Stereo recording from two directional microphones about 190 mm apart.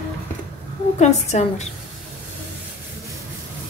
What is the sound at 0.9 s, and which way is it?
Speech, 35° left (ahead or behind).